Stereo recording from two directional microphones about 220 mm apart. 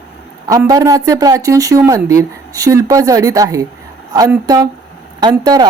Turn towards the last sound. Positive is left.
turn(degrees=-15)  # may be behind; listen again after turning